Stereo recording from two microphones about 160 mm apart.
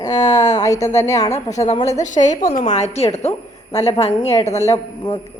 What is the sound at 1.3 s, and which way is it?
A woman's voice, 45° left (ahead or behind).